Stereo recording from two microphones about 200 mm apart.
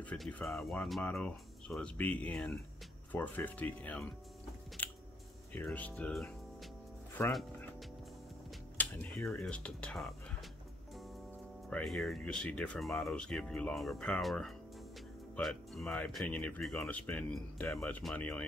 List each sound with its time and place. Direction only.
0.0 s speech: 5° left (ahead or behind)
5.5 s speech: 10° left (ahead or behind)
7.2 s speech: 10° left (ahead or behind)
8.5 s music: 10° left (ahead or behind)
9.4 s speech: 5° left (ahead or behind)
11.7 s speech: centre (ahead or behind)